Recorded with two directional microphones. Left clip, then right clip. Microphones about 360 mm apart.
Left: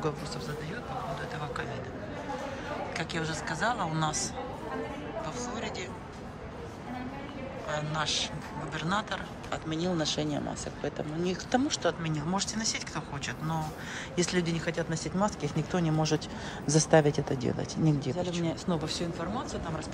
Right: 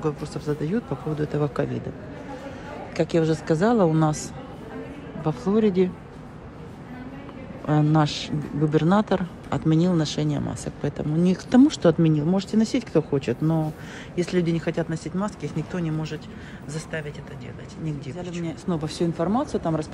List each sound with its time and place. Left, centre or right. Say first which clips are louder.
0.0 s speech: right 6 dB; centre
3.0 s speech: right 11 dB; centre
5.2 s speech: right 16 dB; centre
7.6 s speech: right 10 dB; centre